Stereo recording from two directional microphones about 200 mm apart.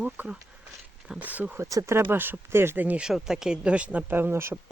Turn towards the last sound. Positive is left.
turn(degrees=-10)  # may be behind; listen again after turning